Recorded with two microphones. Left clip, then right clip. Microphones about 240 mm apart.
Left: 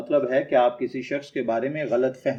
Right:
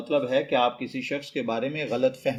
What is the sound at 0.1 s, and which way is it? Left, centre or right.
Speech, right.